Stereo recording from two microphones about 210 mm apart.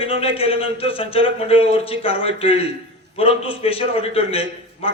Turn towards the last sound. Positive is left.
turn(degrees=25)  # may be behind; listen again after turning